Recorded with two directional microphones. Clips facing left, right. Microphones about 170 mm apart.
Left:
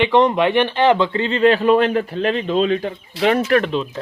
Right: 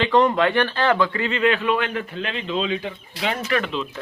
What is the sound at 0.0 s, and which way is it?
Speech, 20° left (ahead or behind).